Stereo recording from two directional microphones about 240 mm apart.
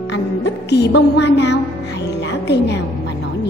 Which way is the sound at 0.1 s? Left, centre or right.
Left.